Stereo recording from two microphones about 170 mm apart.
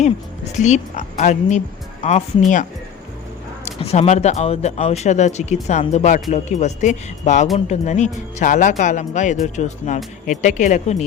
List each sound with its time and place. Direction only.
0.5 s speech: 45° left (ahead or behind)
3.7 s speech: 40° left (ahead or behind)